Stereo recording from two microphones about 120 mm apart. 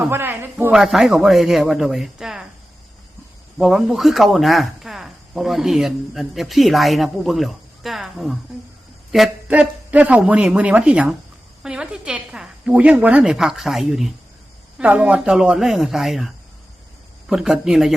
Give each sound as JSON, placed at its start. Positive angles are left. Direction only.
{"t": 0.0, "sound": "a woman's voice", "side_deg": -20}
{"t": 0.7, "sound": "speech", "side_deg": 0}
{"t": 3.6, "sound": "a woman's voice", "side_deg": -5}